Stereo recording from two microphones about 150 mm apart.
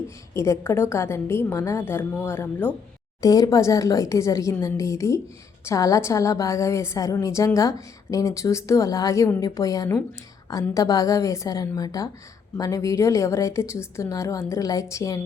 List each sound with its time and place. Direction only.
0.3 s a woman's voice: 20° left (ahead or behind)
3.2 s a woman's voice: 25° left (ahead or behind)